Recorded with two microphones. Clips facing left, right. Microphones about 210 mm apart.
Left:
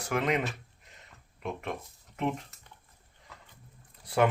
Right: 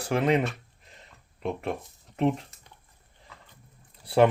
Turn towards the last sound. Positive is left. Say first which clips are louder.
# right 6 dB
turn(degrees=-30)  # may be behind; listen again after turning